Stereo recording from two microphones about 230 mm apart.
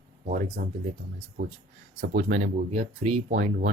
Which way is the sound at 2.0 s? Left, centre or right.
Right.